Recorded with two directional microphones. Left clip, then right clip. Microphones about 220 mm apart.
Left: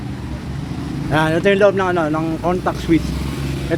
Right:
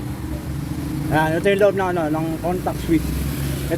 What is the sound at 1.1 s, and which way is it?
Speech, 15° left (ahead or behind).